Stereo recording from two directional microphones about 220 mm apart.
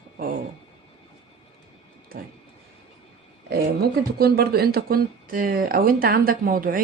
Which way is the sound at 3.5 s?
45° right (ahead or behind).